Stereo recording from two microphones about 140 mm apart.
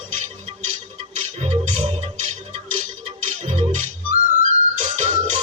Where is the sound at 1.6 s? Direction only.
65° right (ahead or behind).